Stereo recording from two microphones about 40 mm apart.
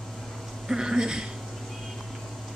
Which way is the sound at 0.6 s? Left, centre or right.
Centre.